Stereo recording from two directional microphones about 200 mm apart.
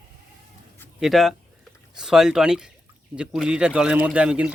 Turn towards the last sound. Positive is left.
turn(degrees=-5)  # may be behind; listen again after turning